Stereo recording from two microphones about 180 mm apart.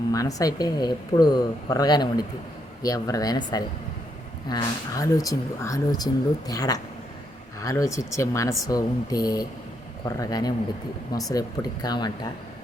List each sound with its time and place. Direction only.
0.1 s speech: 20° left (ahead or behind)